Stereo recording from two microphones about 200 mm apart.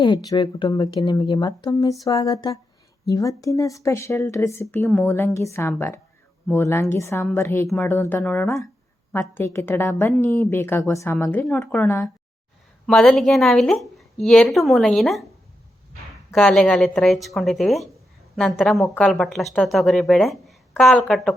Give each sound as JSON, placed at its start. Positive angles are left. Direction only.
{"t": 0.0, "sound": "a woman's voice", "side_deg": 20}
{"t": 16.3, "sound": "speech", "side_deg": 0}